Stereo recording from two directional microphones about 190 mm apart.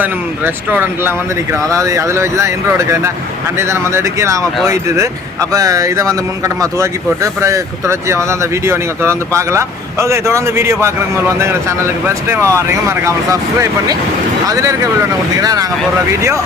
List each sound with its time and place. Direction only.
0.0 s speech: 10° right (ahead or behind)